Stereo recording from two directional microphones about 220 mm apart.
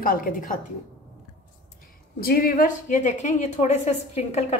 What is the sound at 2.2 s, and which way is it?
A woman's voice, 40° left (ahead or behind).